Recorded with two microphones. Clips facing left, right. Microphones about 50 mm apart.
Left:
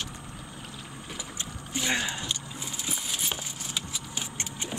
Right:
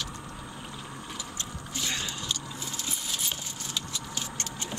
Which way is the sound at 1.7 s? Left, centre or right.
Left.